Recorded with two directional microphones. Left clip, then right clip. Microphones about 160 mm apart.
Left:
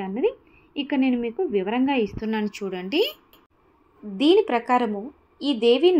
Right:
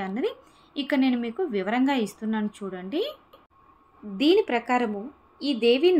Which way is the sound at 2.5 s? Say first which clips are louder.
Left 6 dB; 20° left (ahead or behind).